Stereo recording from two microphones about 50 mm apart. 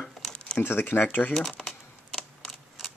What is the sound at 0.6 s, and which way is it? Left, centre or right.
Speech, left.